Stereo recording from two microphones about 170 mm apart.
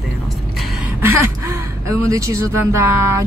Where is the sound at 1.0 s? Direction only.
15° right (ahead or behind).